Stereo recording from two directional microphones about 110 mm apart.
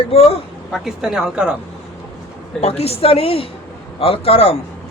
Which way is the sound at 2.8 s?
65° left (ahead or behind).